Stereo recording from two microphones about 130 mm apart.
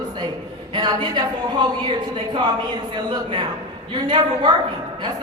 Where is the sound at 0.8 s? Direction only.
35° right (ahead or behind).